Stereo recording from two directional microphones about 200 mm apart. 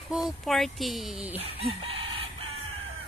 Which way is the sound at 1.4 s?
30° right (ahead or behind).